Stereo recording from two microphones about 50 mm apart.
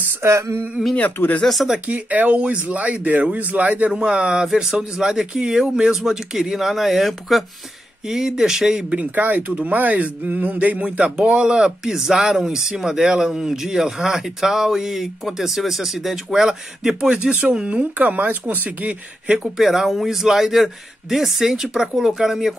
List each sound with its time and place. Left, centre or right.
0.2 s a sound: right
0.9 s speech: left
1.9 s speech: right
3.9 s speech: right
8.9 s speech: right
19.5 s speech: centre